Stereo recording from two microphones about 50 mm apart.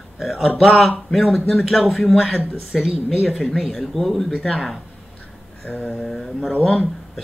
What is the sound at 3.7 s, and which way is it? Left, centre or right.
Speech, centre.